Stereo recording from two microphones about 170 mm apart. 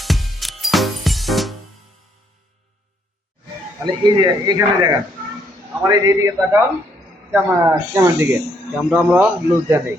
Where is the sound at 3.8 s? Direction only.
25° right (ahead or behind); by 9.3 s 5° right (ahead or behind).